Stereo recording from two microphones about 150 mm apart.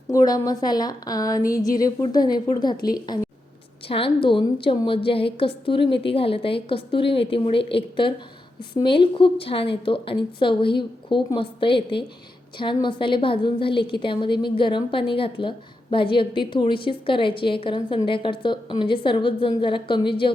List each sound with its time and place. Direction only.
0.1 s a woman's voice: 25° left (ahead or behind)
3.8 s a woman's voice: 35° left (ahead or behind)